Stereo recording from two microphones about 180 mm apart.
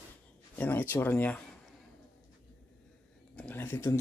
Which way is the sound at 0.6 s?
10° left (ahead or behind).